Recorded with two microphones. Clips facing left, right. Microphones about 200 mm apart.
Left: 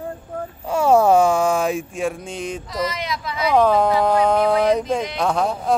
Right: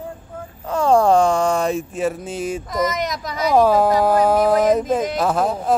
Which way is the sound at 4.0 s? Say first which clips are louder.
Right 1 dB; 5° right (ahead or behind).